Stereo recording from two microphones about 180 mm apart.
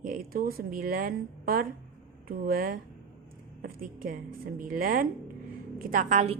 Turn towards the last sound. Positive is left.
turn(degrees=-40)  # may be behind; listen again after turning